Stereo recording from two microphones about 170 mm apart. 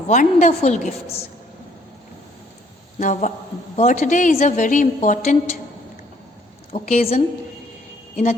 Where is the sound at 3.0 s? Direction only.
45° left (ahead or behind).